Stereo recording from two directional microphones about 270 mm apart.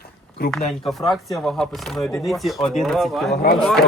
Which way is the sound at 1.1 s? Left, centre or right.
Centre.